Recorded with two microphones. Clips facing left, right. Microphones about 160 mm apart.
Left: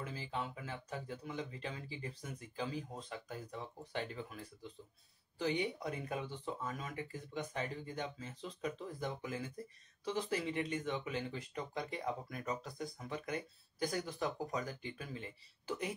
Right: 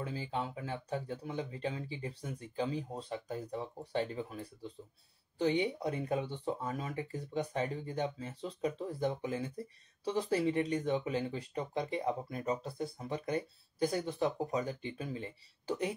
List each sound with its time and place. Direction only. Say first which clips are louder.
0.0 s speech: right 4 dB; 35° right (ahead or behind)